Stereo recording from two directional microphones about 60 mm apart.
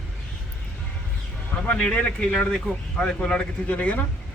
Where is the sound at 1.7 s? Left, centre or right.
Centre.